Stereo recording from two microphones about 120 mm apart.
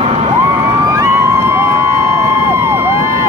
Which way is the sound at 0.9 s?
25° right (ahead or behind).